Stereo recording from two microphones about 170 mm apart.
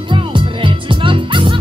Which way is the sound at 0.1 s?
30° right (ahead or behind).